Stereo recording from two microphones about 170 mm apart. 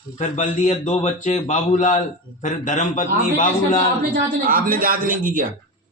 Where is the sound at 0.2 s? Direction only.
45° left (ahead or behind).